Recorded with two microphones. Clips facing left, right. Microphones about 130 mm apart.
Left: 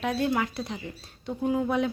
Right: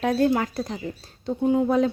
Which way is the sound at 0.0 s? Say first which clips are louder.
Right 5 dB; 45° right (ahead or behind).